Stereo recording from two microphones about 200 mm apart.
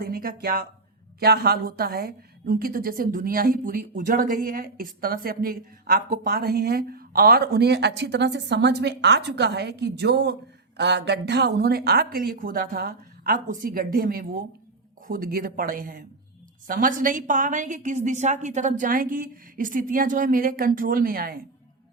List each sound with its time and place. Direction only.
0.0 s a woman's voice: 45° right (ahead or behind)